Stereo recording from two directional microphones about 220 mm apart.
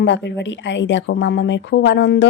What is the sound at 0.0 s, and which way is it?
A woman's voice, 55° left (ahead or behind).